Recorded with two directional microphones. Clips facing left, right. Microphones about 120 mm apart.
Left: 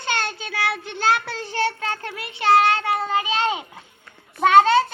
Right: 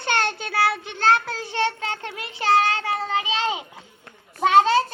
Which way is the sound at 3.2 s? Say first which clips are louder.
Left 2 dB; 25° right (ahead or behind).